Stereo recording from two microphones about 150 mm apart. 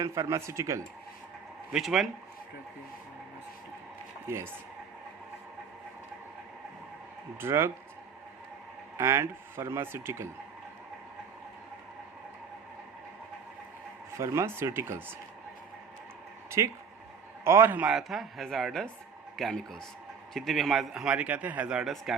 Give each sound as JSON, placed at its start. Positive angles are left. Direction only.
{"t": 0.0, "sound": "speech", "side_deg": -20}
{"t": 1.7, "sound": "a man's voice", "side_deg": 0}
{"t": 4.3, "sound": "speech", "side_deg": -15}
{"t": 7.3, "sound": "speech", "side_deg": -15}
{"t": 9.0, "sound": "speech", "side_deg": -15}
{"t": 14.1, "sound": "speech", "side_deg": -20}
{"t": 16.6, "sound": "a man's voice", "side_deg": -20}